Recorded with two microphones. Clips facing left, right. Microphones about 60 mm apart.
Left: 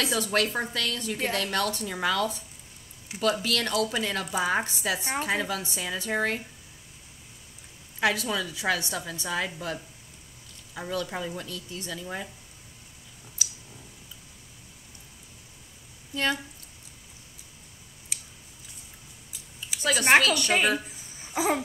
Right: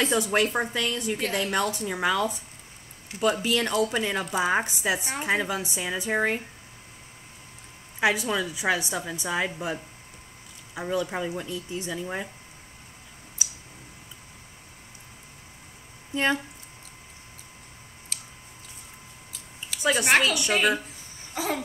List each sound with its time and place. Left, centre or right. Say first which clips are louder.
0.2 s a woman's voice: right 2 dB; centre
8.0 s a woman's voice: right 2 dB; centre
16.1 s speech: right 3 dB; right
19.8 s a woman's voice: left 1 dB; centre
21.3 s babbling: left 3 dB; centre